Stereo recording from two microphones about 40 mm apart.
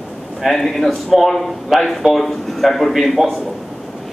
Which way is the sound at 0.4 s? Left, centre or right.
Centre.